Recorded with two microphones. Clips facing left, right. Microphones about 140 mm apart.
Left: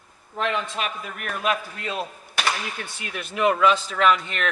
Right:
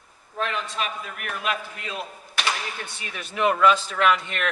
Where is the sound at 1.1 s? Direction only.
40° left (ahead or behind).